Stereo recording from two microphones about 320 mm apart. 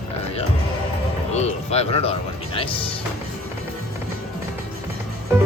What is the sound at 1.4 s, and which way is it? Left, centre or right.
Speech, centre.